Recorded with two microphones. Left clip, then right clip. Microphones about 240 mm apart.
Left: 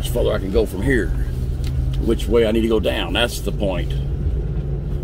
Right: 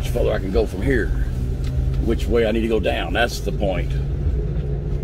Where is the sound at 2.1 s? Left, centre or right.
Left.